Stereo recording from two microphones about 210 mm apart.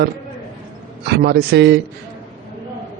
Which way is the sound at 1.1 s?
50° right (ahead or behind).